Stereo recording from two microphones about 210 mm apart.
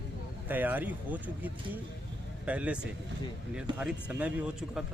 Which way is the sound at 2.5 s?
5° right (ahead or behind).